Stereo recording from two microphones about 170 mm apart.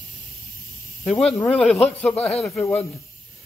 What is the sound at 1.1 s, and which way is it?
A man's voice, 10° left (ahead or behind).